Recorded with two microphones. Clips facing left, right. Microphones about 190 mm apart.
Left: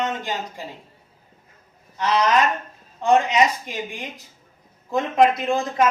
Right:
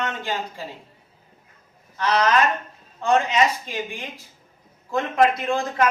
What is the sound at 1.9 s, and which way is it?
A man's voice, 15° left (ahead or behind).